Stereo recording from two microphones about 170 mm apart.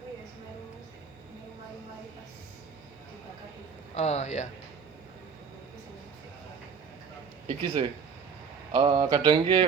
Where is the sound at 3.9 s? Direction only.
40° left (ahead or behind).